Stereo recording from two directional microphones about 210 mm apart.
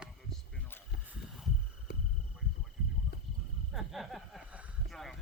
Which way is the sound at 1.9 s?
50° left (ahead or behind).